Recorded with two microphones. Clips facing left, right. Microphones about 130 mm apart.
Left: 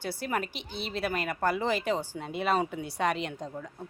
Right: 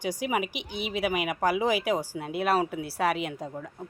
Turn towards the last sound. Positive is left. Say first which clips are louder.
# right 2 dB
turn(degrees=-10)  # may be behind; listen again after turning